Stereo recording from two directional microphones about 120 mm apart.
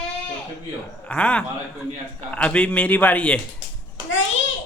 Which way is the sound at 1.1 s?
10° left (ahead or behind).